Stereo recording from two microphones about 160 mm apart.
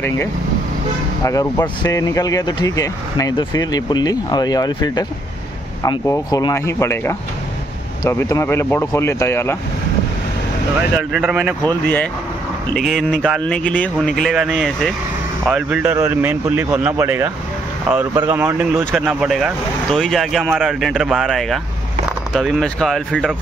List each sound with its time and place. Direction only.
1.2 s speech: 20° left (ahead or behind)
11.0 s speech: 5° right (ahead or behind)
11.6 s speech: 10° left (ahead or behind); by 17.3 s 15° right (ahead or behind)
18.3 s speech: 15° right (ahead or behind)